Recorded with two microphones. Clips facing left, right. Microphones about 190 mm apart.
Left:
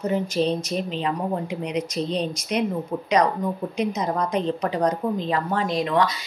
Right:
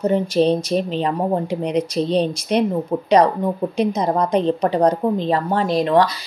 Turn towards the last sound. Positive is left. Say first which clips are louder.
# right 6 dB
turn(degrees=-35)  # may be behind; listen again after turning